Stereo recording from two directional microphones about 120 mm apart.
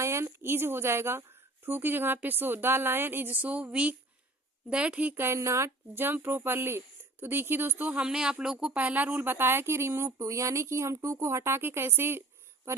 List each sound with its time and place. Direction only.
0.0 s speech: 20° right (ahead or behind)